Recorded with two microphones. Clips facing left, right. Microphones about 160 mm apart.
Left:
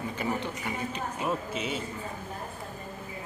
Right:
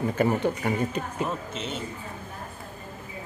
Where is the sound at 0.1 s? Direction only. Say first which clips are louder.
Right 9 dB; 50° right (ahead or behind).